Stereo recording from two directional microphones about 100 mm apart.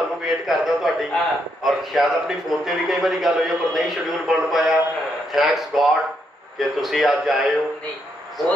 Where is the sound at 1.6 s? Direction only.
Centre (ahead or behind).